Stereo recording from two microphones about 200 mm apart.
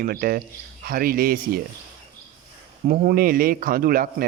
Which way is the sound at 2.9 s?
45° right (ahead or behind).